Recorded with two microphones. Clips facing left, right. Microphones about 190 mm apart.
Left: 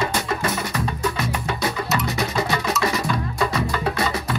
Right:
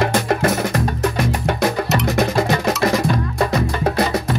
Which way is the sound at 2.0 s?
50° right (ahead or behind).